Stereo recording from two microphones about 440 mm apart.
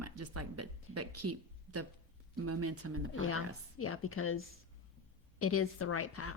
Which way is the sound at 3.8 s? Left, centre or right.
Left.